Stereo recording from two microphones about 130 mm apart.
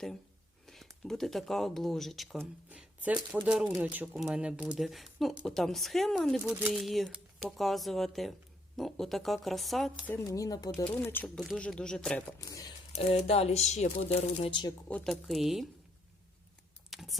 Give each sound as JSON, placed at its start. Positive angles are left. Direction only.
{"t": 1.0, "sound": "speech", "side_deg": 5}
{"t": 2.4, "sound": "speech", "side_deg": -10}
{"t": 10.1, "sound": "speech", "side_deg": 25}
{"t": 10.8, "sound": "speech", "side_deg": 15}
{"t": 11.3, "sound": "speech", "side_deg": 5}
{"t": 12.4, "sound": "speech", "side_deg": 25}
{"t": 12.9, "sound": "speech", "side_deg": 55}
{"t": 14.8, "sound": "speech", "side_deg": 5}
{"t": 16.9, "sound": "typing", "side_deg": 0}